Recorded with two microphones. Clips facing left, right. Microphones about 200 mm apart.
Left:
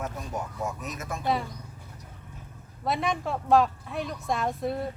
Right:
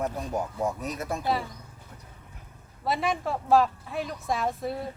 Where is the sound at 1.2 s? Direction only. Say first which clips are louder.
Left 2 dB; 5° right (ahead or behind).